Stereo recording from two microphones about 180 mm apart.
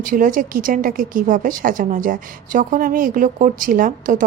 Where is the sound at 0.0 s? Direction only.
50° right (ahead or behind).